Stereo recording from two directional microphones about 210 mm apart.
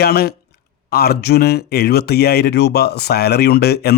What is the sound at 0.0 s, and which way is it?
Speech, 50° left (ahead or behind).